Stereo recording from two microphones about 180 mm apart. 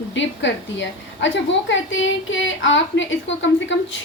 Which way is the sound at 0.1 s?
90° left.